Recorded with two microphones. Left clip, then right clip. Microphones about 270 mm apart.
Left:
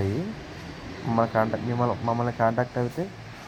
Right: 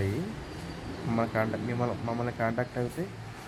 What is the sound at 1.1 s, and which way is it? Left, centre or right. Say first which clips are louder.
Speech: left 6 dB; centre.